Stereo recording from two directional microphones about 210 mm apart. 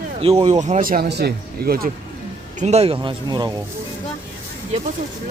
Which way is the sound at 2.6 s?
30° right (ahead or behind).